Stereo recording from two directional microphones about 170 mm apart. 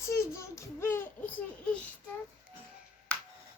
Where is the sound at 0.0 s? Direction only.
15° left (ahead or behind).